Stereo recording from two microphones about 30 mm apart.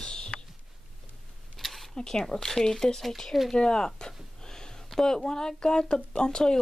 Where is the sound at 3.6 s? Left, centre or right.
Left.